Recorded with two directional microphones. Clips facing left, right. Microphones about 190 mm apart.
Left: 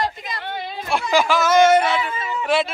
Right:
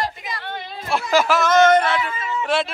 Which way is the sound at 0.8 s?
Centre (ahead or behind).